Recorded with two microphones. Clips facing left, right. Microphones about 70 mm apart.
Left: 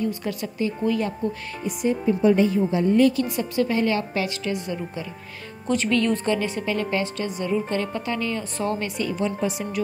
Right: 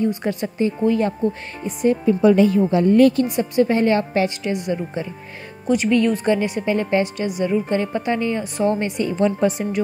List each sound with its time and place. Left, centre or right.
0.0 s a woman's voice: right
2.0 s a woman's voice: right
3.3 s a woman's voice: right
5.7 s a woman's voice: centre
9.2 s a woman's voice: right